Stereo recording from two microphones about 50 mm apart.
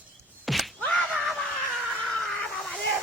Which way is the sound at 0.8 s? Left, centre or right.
Centre.